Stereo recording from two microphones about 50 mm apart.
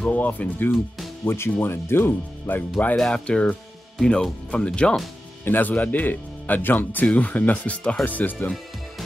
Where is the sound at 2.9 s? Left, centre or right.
Centre.